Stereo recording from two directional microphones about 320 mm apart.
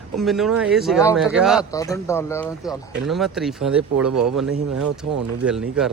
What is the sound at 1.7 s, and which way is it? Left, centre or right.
Speech, centre.